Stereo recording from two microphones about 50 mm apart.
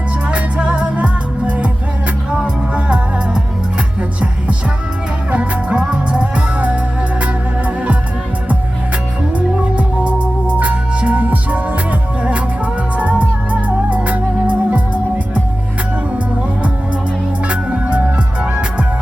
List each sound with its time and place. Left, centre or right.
0.3 s music: right
5.3 s music: right
9.7 s music: right
17.5 s music: right